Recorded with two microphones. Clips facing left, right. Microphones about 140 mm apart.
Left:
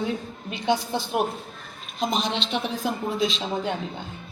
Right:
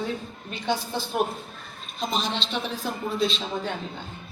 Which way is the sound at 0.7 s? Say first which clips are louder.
Left 3 dB; 15° left (ahead or behind).